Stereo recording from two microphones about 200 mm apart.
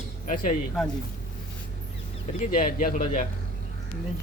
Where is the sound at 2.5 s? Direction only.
40° left (ahead or behind).